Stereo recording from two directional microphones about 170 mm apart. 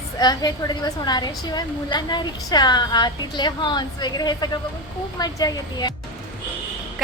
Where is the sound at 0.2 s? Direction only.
25° left (ahead or behind).